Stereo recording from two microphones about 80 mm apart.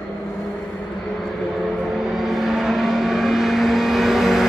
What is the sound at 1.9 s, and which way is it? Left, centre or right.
Vehicle, centre.